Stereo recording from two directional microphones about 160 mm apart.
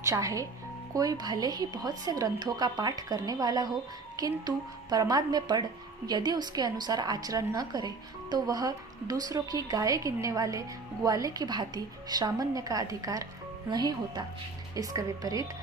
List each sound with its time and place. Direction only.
0.0 s a woman's voice: 20° right (ahead or behind)